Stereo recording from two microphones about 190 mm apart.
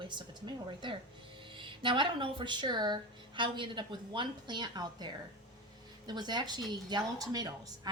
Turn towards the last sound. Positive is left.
turn(degrees=-20)  # may be behind; listen again after turning